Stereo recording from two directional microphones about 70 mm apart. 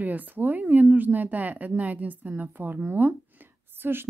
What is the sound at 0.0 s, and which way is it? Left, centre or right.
Speech, right.